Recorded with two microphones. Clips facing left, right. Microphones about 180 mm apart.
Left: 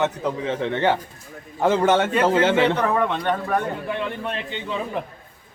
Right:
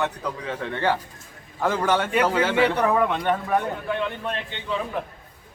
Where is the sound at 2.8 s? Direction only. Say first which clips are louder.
Even; 5° right (ahead or behind).